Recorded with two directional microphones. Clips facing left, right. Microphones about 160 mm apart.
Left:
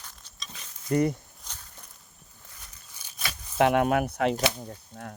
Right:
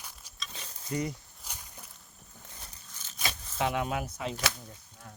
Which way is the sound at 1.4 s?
10° right (ahead or behind).